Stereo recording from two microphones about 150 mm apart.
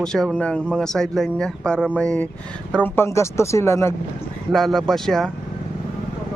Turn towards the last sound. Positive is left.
turn(degrees=5)  # may be behind; listen again after turning